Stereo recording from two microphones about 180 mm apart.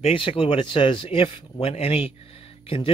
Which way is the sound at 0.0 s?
30° left (ahead or behind).